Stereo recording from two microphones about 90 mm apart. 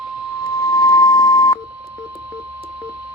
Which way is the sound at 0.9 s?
55° left (ahead or behind).